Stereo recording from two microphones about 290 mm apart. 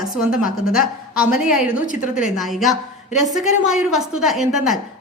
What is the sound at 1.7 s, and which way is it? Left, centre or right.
Speech, left.